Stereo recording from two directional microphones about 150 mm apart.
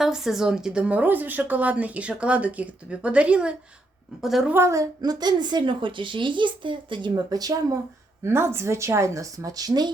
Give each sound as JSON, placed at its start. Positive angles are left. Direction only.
{"t": 0.0, "sound": "a woman's voice", "side_deg": -5}
{"t": 4.5, "sound": "a woman's voice", "side_deg": -20}